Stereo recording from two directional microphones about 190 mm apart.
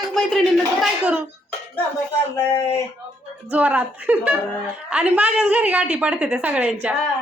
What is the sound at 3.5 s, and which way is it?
A woman's voice, 10° right (ahead or behind).